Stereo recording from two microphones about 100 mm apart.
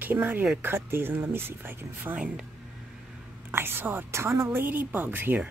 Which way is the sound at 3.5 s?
20° right (ahead or behind).